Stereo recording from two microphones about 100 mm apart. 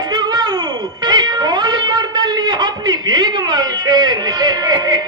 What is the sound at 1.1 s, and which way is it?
Cat, 45° right (ahead or behind).